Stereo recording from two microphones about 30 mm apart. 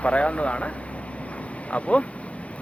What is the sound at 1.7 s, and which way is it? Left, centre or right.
Speech, left.